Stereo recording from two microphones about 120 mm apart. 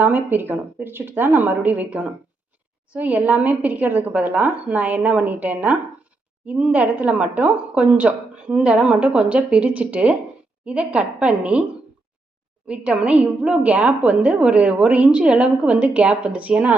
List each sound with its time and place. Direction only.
0.0 s a woman's voice: 15° right (ahead or behind)
12.6 s a woman's voice: 10° right (ahead or behind)